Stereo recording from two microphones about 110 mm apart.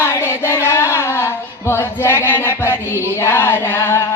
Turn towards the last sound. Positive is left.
turn(degrees=25)  # may be behind; listen again after turning